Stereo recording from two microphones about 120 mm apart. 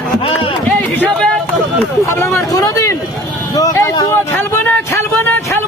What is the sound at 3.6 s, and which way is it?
Vehicle, 30° left (ahead or behind).